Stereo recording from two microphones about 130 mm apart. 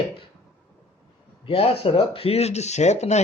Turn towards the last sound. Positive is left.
turn(degrees=60)  # may be behind; listen again after turning